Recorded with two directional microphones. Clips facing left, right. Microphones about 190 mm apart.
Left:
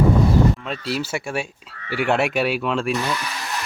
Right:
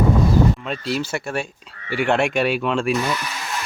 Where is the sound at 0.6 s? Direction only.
Centre (ahead or behind).